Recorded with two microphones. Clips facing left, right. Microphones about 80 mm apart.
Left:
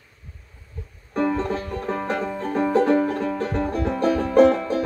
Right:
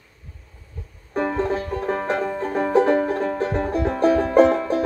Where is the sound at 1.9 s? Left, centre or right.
Right.